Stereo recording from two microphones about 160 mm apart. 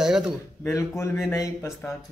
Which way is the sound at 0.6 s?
15° left (ahead or behind).